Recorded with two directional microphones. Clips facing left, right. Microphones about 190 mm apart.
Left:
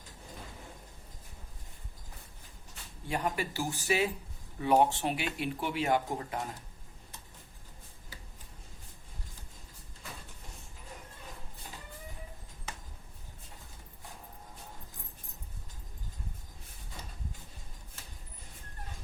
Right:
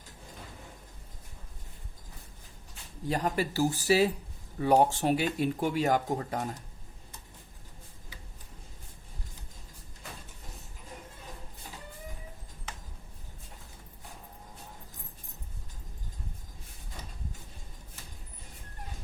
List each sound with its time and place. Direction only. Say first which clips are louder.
3.0 s speech: right 4 dB; 35° right (ahead or behind)